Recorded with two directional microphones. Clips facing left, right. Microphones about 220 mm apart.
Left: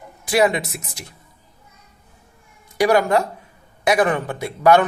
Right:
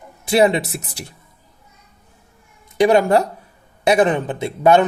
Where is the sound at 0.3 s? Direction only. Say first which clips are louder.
Right 3 dB; 25° right (ahead or behind).